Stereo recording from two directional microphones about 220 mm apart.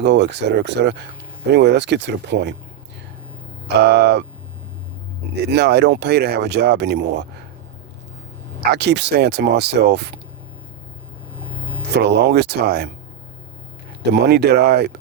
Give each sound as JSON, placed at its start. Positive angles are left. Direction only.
{"t": 0.0, "sound": "speech", "side_deg": -50}
{"t": 3.8, "sound": "speech", "side_deg": -50}
{"t": 5.5, "sound": "speech", "side_deg": -50}
{"t": 8.7, "sound": "speech", "side_deg": -50}
{"t": 11.9, "sound": "speech", "side_deg": -50}
{"t": 14.1, "sound": "speech", "side_deg": -50}